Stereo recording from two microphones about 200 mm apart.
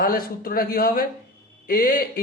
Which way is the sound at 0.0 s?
45° left (ahead or behind).